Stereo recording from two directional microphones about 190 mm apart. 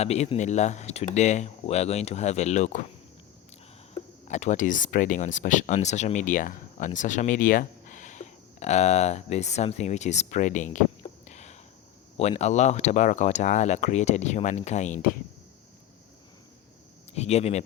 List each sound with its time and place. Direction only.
0.0 s speech: 35° left (ahead or behind)
3.9 s speech: 40° left (ahead or behind)
17.2 s speech: 35° left (ahead or behind)